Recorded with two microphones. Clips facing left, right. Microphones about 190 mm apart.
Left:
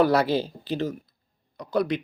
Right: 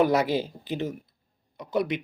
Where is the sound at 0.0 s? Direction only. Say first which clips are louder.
Left 2 dB; 20° right (ahead or behind).